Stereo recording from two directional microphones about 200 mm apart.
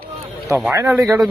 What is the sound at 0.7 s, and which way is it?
Speech, 15° right (ahead or behind).